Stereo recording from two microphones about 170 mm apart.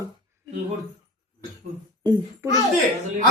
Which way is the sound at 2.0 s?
25° right (ahead or behind).